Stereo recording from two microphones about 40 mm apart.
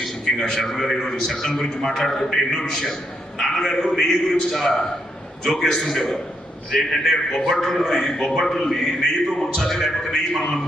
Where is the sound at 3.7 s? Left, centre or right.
Centre.